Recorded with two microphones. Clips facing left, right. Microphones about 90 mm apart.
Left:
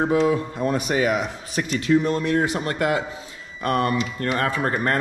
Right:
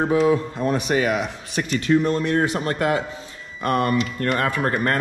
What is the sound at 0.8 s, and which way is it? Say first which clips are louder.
Speech: even; 45° right (ahead or behind).